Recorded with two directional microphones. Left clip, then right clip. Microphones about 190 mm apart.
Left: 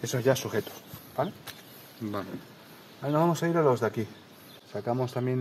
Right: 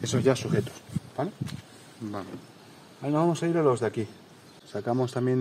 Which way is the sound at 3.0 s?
10° right (ahead or behind).